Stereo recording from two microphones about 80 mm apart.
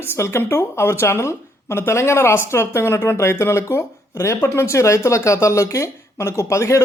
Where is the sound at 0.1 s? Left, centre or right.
Left.